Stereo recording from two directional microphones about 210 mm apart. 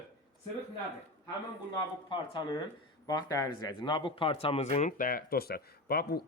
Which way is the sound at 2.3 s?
20° left (ahead or behind).